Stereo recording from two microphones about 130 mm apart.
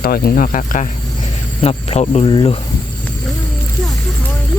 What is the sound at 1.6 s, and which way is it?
Speech, 50° left (ahead or behind).